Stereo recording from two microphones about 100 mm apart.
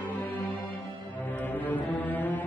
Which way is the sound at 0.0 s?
15° left (ahead or behind).